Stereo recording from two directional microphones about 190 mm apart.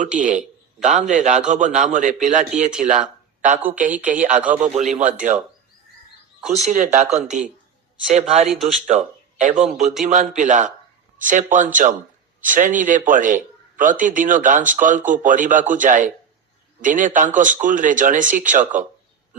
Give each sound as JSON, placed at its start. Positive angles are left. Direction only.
{"t": 1.0, "sound": "speech", "side_deg": -40}
{"t": 2.8, "sound": "a sound", "side_deg": -40}
{"t": 3.8, "sound": "speech", "side_deg": -45}
{"t": 6.7, "sound": "speech", "side_deg": -40}
{"t": 8.4, "sound": "speech", "side_deg": 0}
{"t": 9.4, "sound": "a man's voice", "side_deg": -40}